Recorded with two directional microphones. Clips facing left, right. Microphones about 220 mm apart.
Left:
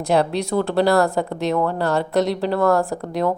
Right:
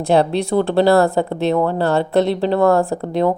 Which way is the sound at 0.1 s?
30° right (ahead or behind).